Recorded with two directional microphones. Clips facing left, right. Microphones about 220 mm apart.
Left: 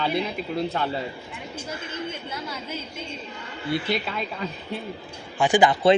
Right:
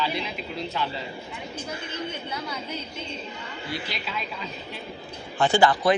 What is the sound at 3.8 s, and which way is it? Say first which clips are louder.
Speech: left 7 dB; 55° left (ahead or behind).